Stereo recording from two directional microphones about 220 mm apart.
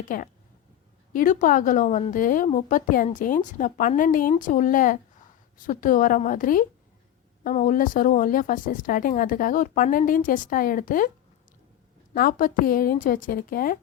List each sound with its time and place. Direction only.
0.1 s a woman's voice: 40° left (ahead or behind)
12.1 s a woman's voice: 40° left (ahead or behind)